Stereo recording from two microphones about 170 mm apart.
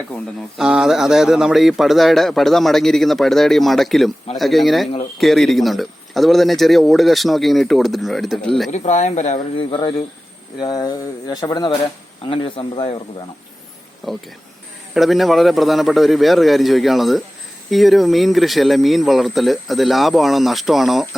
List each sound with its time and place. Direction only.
0.5 s a man's voice: 5° right (ahead or behind)
8.7 s speech: 40° left (ahead or behind)
9.6 s speech: 30° left (ahead or behind)
12.2 s speech: 30° left (ahead or behind)
14.0 s a man's voice: centre (ahead or behind)